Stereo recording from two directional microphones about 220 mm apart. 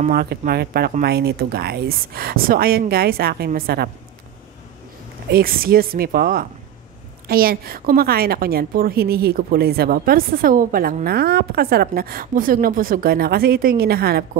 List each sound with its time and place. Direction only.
0.0 s a woman's voice: 45° right (ahead or behind)
5.3 s a woman's voice: 40° right (ahead or behind)